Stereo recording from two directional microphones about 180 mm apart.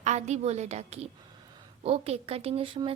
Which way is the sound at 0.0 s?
40° right (ahead or behind).